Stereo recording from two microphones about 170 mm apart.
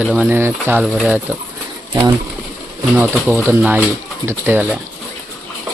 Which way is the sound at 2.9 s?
10° right (ahead or behind).